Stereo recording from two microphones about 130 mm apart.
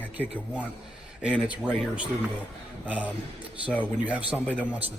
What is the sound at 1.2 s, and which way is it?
A man's voice, 10° right (ahead or behind).